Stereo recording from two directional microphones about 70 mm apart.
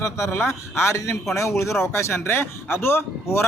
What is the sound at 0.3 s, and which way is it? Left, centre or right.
A man's voice, left.